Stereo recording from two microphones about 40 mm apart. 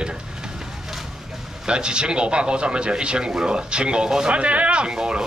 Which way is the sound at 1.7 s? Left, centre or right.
Right.